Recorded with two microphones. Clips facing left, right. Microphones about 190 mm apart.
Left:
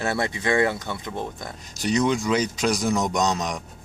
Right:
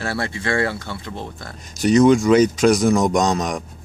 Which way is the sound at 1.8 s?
50° right (ahead or behind).